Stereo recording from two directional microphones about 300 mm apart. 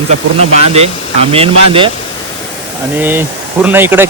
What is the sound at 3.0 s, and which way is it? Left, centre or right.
Speech, centre.